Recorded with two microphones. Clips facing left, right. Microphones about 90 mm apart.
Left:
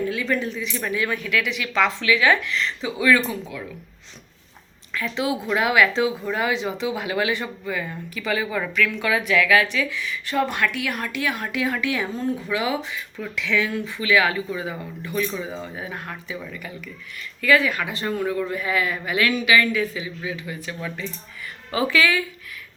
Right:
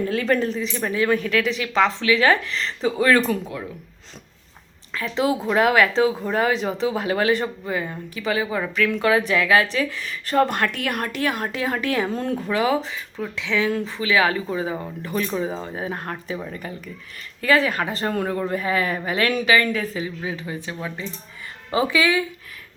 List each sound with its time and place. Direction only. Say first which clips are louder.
0.1 s speech: right 4 dB; 45° right (ahead or behind)
4.9 s speech: right 3 dB; 35° right (ahead or behind)
18.1 s speech: even; 50° right (ahead or behind)
18.3 s speech: right 1 dB; 35° right (ahead or behind); by 22.2 s 20° right (ahead or behind)